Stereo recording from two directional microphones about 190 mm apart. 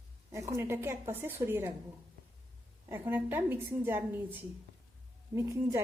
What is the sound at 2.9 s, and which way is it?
A woman's voice, 10° right (ahead or behind).